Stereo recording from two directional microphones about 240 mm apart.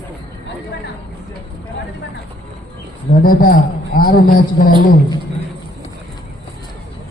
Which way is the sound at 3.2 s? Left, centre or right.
Left.